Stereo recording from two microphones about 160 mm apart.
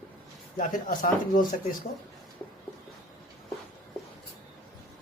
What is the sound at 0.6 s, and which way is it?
Speech, 60° left (ahead or behind).